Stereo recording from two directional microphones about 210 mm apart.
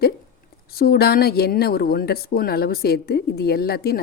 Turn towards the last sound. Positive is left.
turn(degrees=50)  # may be behind; listen again after turning